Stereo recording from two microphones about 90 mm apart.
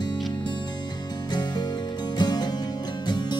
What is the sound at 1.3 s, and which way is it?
Music, 55° left (ahead or behind).